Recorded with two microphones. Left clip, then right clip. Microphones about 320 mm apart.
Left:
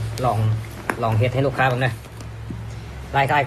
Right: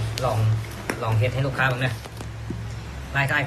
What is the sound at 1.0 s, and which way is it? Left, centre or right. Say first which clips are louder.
Speech: left 6 dB; centre.